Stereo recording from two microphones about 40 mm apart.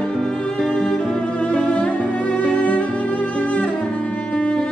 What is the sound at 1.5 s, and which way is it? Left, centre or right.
Music, left.